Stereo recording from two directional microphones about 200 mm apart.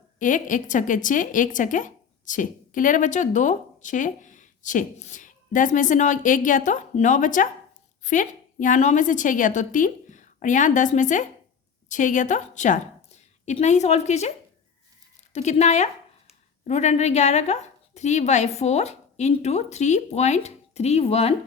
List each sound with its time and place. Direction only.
0.2 s a woman's voice: 40° left (ahead or behind)